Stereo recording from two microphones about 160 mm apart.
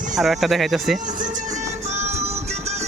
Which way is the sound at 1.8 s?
45° right (ahead or behind).